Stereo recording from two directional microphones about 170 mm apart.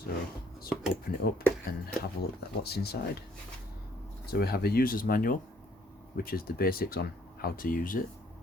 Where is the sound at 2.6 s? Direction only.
70° left (ahead or behind).